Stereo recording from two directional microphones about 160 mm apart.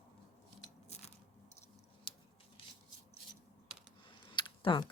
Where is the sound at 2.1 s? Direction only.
35° left (ahead or behind).